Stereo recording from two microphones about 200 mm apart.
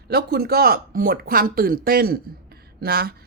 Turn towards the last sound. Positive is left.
turn(degrees=-50)  # may be behind; listen again after turning